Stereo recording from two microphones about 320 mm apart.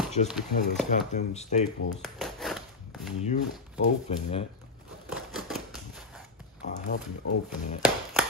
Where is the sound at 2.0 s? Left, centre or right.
Centre.